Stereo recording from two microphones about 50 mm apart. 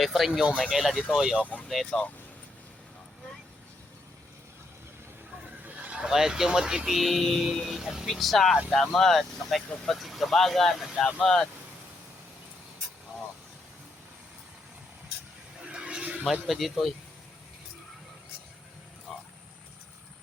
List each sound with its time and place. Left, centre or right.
0.0 s speech: centre
1.9 s speech: centre
5.6 s a sound: right
6.1 s speech: centre
8.0 s speech: centre
15.7 s a sound: centre
16.5 s speech: centre